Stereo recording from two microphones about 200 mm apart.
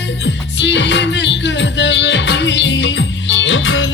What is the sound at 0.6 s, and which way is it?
Music, 60° left (ahead or behind).